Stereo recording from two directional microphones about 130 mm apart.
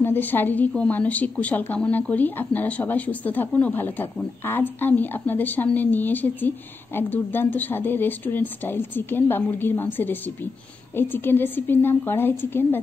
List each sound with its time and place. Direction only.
0.0 s a woman's voice: 15° left (ahead or behind)